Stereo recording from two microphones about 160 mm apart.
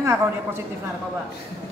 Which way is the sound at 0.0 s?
15° right (ahead or behind).